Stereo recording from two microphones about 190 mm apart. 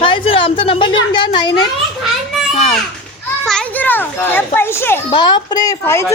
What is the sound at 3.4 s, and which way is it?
A child's voice, 5° left (ahead or behind).